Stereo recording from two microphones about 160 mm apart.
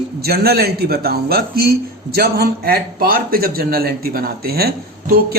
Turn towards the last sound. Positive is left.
turn(degrees=-70)  # may be behind; listen again after turning